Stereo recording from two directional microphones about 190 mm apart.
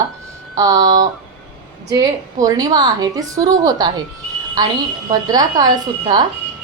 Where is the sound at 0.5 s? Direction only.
20° right (ahead or behind).